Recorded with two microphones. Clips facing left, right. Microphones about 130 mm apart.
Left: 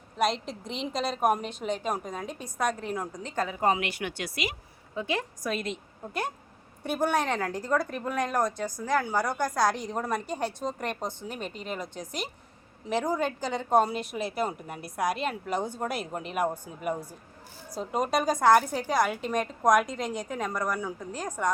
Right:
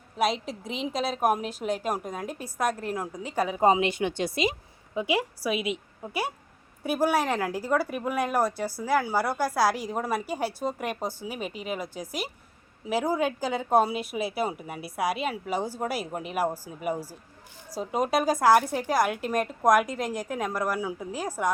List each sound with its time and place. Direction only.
0.2 s speech: centre (ahead or behind); by 4.5 s 25° right (ahead or behind)
4.9 s a woman's voice: 10° right (ahead or behind)